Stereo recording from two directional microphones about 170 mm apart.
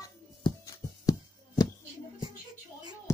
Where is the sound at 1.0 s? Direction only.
20° left (ahead or behind).